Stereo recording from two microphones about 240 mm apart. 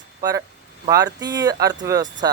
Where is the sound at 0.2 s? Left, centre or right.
Centre.